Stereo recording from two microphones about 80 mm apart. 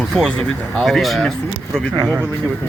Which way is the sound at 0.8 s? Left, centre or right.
Centre.